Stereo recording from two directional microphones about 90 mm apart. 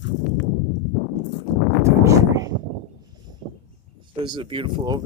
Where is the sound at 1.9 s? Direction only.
35° right (ahead or behind).